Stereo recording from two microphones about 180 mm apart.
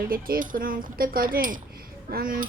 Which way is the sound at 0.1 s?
50° right (ahead or behind).